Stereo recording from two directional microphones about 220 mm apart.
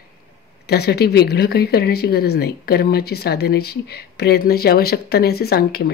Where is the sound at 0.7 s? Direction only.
45° left (ahead or behind).